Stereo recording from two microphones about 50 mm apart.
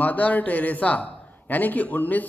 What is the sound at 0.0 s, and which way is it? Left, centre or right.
Speech, left.